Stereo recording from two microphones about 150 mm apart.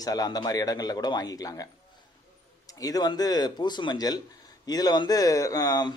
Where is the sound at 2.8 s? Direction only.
25° left (ahead or behind).